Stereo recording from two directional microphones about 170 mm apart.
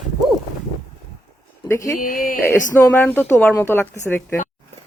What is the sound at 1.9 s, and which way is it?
Speech, 55° left (ahead or behind).